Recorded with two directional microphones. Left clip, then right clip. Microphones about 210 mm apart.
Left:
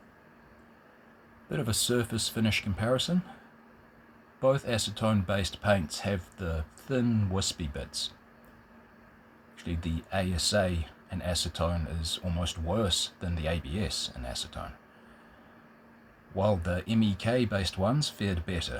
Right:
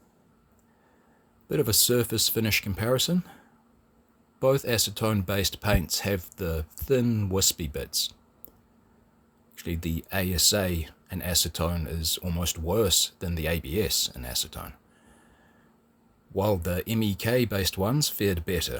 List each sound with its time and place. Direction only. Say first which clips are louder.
1.5 s speech: right 6 dB; 50° right (ahead or behind)
4.4 s speech: right 3 dB; 50° right (ahead or behind)
9.6 s speech: right 4 dB; 45° right (ahead or behind)
16.3 s speech: right 2 dB; 50° right (ahead or behind)